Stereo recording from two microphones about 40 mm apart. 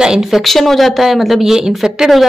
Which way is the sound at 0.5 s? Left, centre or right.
Centre.